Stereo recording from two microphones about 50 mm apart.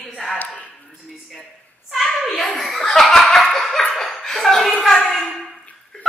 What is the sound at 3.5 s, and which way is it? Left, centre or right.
Chuckle, centre.